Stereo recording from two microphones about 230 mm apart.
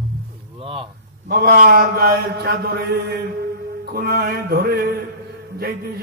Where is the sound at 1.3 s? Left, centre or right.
Right.